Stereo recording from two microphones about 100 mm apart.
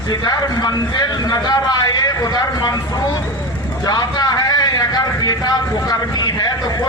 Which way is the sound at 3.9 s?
40° left (ahead or behind).